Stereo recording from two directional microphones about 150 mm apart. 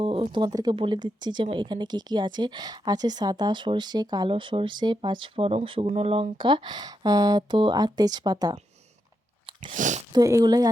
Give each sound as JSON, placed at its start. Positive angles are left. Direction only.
{"t": 0.0, "sound": "speech", "side_deg": -35}
{"t": 9.7, "sound": "speech", "side_deg": -55}
{"t": 10.1, "sound": "speech", "side_deg": -25}